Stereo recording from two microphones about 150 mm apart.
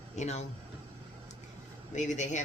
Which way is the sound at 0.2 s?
50° left (ahead or behind).